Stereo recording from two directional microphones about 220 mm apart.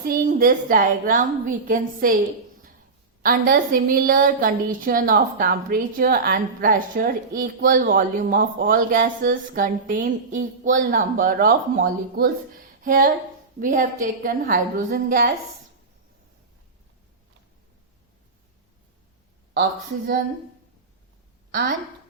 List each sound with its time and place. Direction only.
0.1 s a woman's voice: 40° right (ahead or behind)